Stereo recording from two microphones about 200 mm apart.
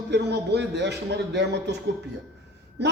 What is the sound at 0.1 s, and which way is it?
A man's voice, 55° right (ahead or behind).